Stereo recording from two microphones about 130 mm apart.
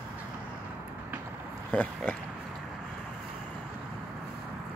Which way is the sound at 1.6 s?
10° left (ahead or behind).